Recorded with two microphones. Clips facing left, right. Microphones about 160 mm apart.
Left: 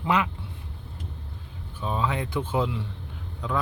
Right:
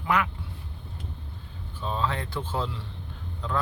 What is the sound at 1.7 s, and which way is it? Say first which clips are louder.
A man's voice: left 2 dB; 10° left (ahead or behind).